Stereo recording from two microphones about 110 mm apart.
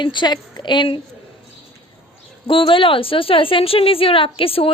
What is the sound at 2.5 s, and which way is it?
A woman's voice, 55° left (ahead or behind).